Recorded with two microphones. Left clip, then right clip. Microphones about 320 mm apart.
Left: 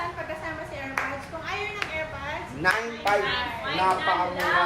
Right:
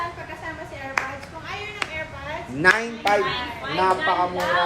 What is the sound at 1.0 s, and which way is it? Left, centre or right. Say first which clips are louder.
Clapping: right 3 dB; right.